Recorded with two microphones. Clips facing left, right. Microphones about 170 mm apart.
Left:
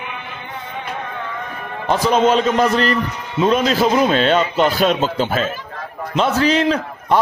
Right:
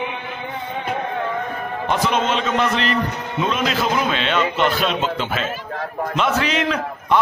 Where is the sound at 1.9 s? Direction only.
40° left (ahead or behind).